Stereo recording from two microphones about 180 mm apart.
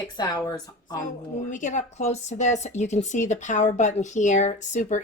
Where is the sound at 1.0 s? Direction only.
45° left (ahead or behind).